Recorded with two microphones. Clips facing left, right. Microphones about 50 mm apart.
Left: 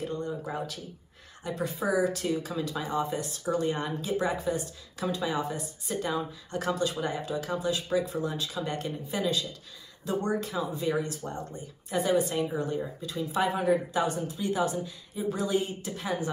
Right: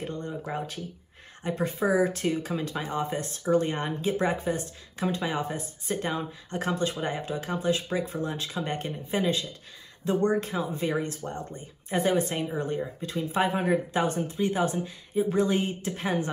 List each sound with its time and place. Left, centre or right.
0.5 s speech: right